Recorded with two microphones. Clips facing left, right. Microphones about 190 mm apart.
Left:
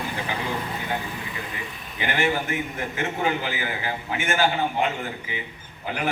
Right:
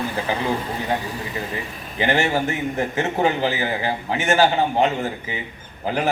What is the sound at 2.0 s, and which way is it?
A man's voice, 40° right (ahead or behind).